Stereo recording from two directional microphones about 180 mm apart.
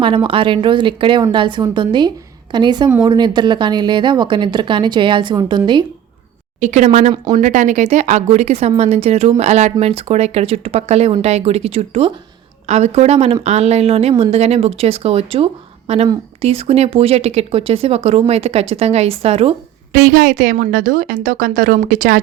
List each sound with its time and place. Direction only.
0.0 s speech: 30° right (ahead or behind)
6.6 s speech: 40° right (ahead or behind)
19.9 s a woman's voice: 50° right (ahead or behind)